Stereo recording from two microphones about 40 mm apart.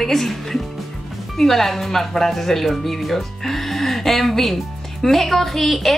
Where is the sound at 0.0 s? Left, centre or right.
Centre.